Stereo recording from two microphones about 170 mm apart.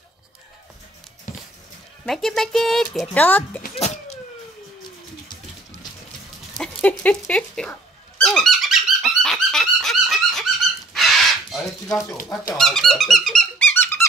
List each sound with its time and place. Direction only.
2.0 s speech: centre (ahead or behind)
3.7 s a sound: 40° left (ahead or behind)
6.6 s speech: 5° left (ahead or behind)
8.2 s dog: 5° left (ahead or behind)
10.9 s crow: centre (ahead or behind)
12.5 s squeak: centre (ahead or behind)